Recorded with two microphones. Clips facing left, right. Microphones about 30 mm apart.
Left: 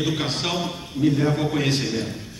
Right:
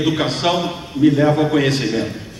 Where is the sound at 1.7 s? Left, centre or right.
Centre.